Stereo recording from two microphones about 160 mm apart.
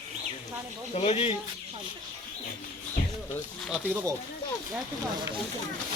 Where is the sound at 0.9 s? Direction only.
40° left (ahead or behind).